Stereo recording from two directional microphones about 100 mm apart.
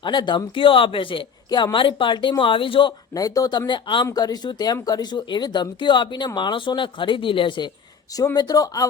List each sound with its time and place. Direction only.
0.0 s speech: 50° left (ahead or behind)
3.2 s speech: 35° left (ahead or behind)
3.7 s speech: 55° left (ahead or behind)
4.0 s speech: 40° left (ahead or behind)
8.1 s speech: 35° left (ahead or behind)